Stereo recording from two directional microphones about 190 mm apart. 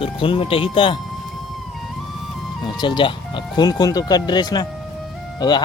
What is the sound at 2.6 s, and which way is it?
Speech, 25° left (ahead or behind).